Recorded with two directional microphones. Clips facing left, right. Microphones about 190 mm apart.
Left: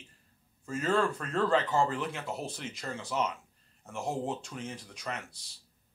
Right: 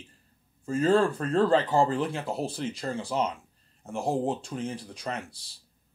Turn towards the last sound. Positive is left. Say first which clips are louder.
# right 5 dB
turn(degrees=-35)  # may be behind; listen again after turning